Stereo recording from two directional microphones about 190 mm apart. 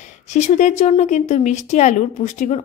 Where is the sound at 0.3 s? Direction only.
40° left (ahead or behind).